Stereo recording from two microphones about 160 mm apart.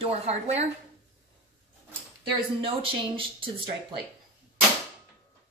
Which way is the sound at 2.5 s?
35° right (ahead or behind).